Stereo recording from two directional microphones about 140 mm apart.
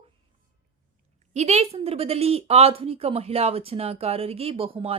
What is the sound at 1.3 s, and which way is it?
A woman's voice, 55° right (ahead or behind).